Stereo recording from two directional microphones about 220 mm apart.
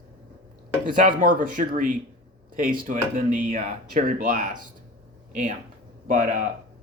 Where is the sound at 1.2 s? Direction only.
40° right (ahead or behind).